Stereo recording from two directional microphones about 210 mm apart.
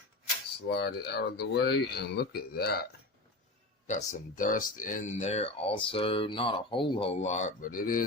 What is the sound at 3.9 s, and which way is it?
Speech, 35° left (ahead or behind).